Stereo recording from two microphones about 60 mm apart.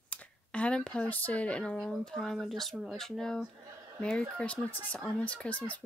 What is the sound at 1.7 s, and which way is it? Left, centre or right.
Speech, centre.